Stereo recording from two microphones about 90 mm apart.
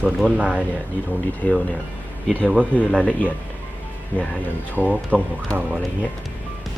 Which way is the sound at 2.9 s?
10° left (ahead or behind).